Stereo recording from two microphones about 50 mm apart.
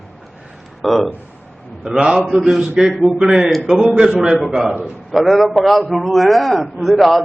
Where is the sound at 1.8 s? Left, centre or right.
Centre.